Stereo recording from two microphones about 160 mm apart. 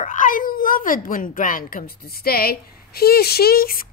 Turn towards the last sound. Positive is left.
turn(degrees=70)  # may be behind; listen again after turning